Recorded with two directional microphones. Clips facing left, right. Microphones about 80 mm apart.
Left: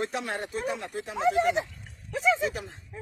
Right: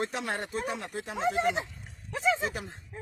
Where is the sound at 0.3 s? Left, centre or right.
Right.